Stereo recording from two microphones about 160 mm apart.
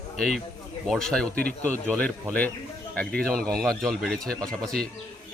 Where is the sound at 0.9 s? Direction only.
5° left (ahead or behind).